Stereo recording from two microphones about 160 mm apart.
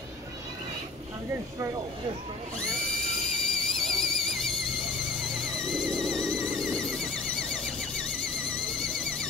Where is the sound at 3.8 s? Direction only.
Centre (ahead or behind).